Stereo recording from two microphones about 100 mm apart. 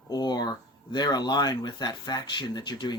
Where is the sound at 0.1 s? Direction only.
45° left (ahead or behind).